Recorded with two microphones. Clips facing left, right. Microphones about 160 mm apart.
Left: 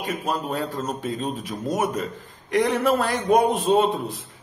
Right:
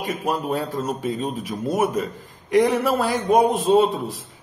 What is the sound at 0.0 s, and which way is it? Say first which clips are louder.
A man's voice: right 2 dB; 15° right (ahead or behind).